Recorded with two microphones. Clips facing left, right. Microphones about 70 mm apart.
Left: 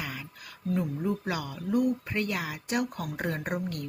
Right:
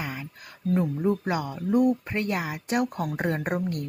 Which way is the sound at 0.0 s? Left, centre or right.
Right.